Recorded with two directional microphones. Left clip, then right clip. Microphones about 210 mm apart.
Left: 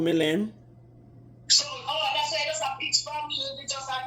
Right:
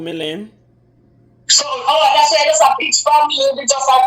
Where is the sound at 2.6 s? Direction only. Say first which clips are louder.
Right 16 dB; 45° right (ahead or behind).